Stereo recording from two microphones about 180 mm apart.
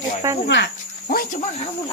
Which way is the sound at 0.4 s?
80° left.